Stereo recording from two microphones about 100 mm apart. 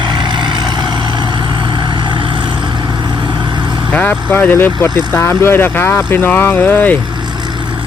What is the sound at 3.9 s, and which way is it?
Speech, 15° left (ahead or behind).